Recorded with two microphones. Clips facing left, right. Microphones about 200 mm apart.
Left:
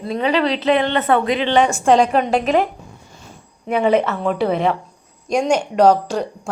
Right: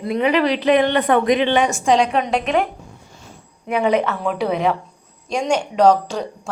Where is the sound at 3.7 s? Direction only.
Centre (ahead or behind).